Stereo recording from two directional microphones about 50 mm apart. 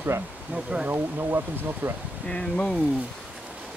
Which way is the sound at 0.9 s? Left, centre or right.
Right.